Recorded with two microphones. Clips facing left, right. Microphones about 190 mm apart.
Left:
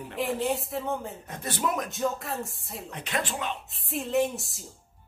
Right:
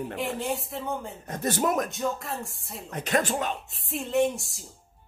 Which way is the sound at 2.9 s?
45° right (ahead or behind).